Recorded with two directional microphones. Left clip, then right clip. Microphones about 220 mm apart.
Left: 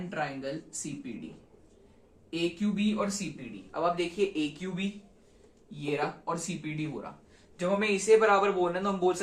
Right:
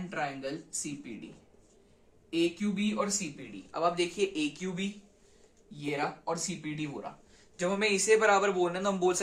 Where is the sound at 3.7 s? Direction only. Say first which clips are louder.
Even; 45° right (ahead or behind).